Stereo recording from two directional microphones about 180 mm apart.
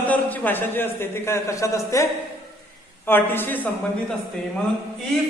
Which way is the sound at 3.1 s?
10° left (ahead or behind).